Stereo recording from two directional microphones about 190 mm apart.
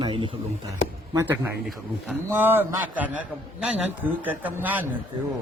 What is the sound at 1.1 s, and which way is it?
A man's voice, 10° right (ahead or behind).